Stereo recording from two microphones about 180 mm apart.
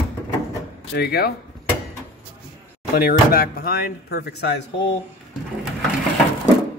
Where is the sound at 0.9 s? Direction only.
60° left (ahead or behind).